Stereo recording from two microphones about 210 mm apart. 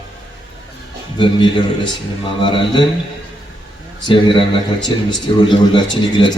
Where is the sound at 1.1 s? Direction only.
25° left (ahead or behind).